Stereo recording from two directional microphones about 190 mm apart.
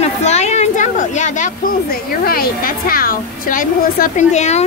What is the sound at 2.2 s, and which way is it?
Speech, 50° left (ahead or behind).